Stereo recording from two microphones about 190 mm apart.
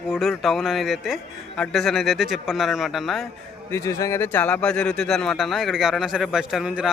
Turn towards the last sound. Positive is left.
turn(degrees=-5)  # may be behind; listen again after turning